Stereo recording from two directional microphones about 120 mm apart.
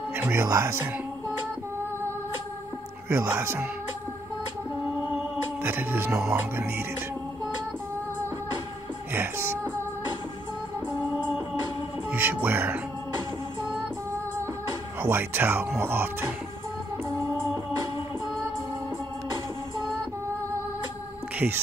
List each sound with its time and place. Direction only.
0.1 s music: 20° right (ahead or behind)
3.1 s speech: 20° right (ahead or behind)
5.6 s speech: 20° right (ahead or behind)
12.1 s speech: 15° right (ahead or behind)
15.0 s speech: 15° right (ahead or behind)